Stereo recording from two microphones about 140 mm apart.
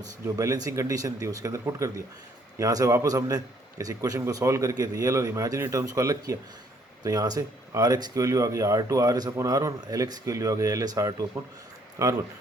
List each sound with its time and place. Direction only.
0.0 s a man's voice: 25° right (ahead or behind)